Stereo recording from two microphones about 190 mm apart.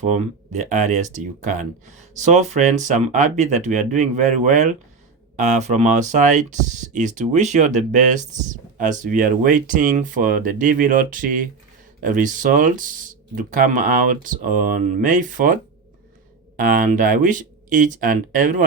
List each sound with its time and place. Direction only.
0.0 s speech: 40° right (ahead or behind)
16.6 s speech: 45° right (ahead or behind)